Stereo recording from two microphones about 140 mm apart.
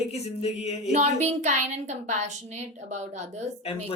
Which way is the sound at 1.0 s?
55° right (ahead or behind).